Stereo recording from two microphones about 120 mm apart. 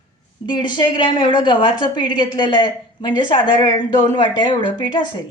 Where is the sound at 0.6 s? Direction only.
40° left (ahead or behind).